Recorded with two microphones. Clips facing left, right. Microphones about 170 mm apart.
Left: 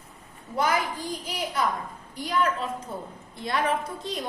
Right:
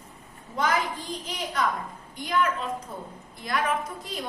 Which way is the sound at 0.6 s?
10° left (ahead or behind).